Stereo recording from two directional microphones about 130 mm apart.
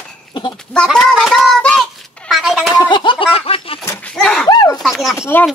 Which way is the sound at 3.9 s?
10° left (ahead or behind).